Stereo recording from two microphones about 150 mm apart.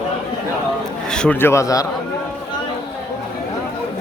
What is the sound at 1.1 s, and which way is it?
Speech, 5° left (ahead or behind).